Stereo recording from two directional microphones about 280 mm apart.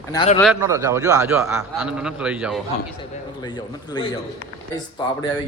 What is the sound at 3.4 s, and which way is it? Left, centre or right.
Speech, centre.